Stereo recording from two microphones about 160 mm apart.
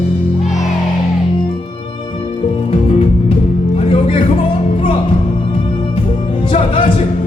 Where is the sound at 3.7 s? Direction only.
35° left (ahead or behind).